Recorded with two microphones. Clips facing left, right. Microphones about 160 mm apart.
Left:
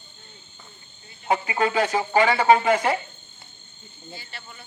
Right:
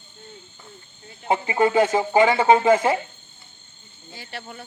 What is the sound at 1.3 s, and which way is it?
Speech, 20° right (ahead or behind).